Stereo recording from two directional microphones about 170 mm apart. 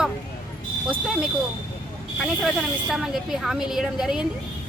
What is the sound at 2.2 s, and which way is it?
Speech, centre (ahead or behind).